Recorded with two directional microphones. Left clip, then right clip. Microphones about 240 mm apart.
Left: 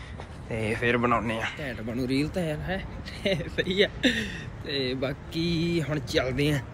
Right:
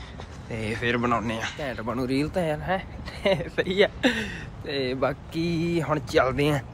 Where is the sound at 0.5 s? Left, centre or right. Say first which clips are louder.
Left 1 dB; centre.